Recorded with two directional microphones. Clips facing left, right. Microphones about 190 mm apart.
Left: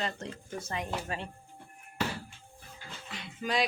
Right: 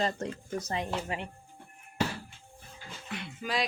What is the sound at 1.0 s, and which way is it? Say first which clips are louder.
Speech: right 2 dB; 20° right (ahead or behind).